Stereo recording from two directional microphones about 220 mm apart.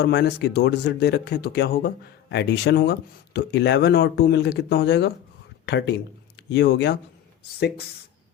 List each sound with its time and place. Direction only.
0.0 s speech: 50° left (ahead or behind)